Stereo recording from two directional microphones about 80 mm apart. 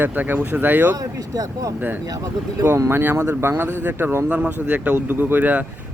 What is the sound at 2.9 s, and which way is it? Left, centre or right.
Speech, right.